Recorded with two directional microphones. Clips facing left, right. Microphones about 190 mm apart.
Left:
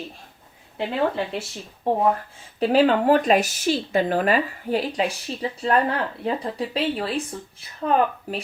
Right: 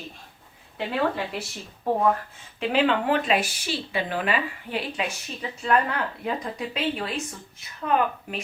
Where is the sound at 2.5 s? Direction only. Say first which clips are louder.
Left 5 dB; 40° left (ahead or behind).